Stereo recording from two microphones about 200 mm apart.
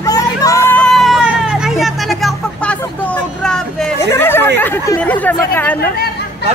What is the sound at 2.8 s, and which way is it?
Speech, 10° left (ahead or behind).